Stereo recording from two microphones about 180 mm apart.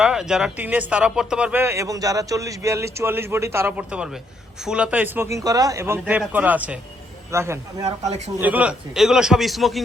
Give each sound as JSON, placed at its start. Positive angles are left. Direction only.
{"t": 0.0, "sound": "a man's voice", "side_deg": -5}